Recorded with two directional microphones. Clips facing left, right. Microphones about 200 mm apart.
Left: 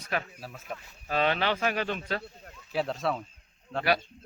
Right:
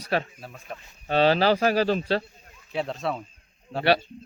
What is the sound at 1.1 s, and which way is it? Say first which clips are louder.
Speech: right 7 dB; 30° right (ahead or behind).